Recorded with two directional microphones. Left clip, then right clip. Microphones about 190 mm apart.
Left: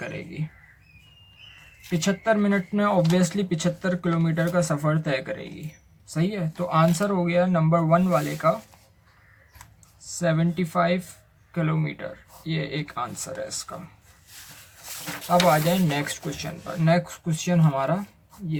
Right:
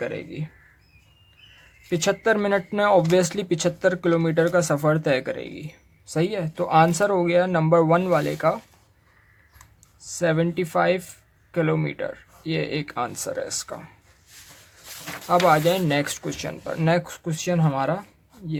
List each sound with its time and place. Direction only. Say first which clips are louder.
1.9 s speech: right 3 dB; 45° right (ahead or behind)
10.2 s speech: right 3 dB; 45° right (ahead or behind)
15.3 s speech: right 2 dB; 55° right (ahead or behind)